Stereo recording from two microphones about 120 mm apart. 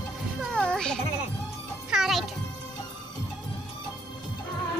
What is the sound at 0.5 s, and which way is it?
Music, 5° left (ahead or behind).